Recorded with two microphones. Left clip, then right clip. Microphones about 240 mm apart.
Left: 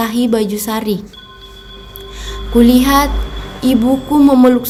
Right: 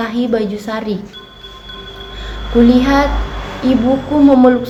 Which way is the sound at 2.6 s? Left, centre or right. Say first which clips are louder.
Left 1 dB; left.